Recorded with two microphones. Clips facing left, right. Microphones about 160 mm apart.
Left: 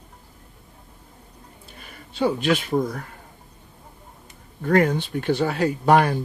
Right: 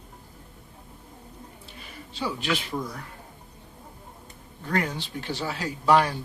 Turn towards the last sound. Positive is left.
turn(degrees=50)  # may be behind; listen again after turning